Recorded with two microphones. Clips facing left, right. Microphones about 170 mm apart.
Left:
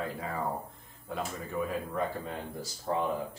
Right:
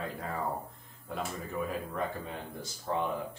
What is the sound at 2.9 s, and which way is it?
Speech, 15° left (ahead or behind).